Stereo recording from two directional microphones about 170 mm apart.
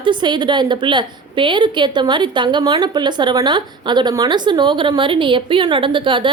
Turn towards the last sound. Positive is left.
turn(degrees=-30)  # may be behind; listen again after turning